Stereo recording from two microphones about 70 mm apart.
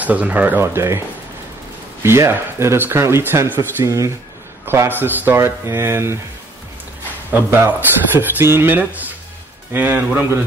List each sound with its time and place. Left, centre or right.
0.0 s speech: right
0.6 s speech: right
2.0 s speech: right
3.8 s speech: right
4.8 s speech: right
7.2 s speech: right
8.7 s speech: right